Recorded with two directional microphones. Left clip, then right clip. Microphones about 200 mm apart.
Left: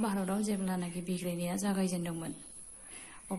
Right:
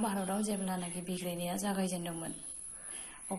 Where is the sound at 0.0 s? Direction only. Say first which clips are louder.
Even; 40° left (ahead or behind).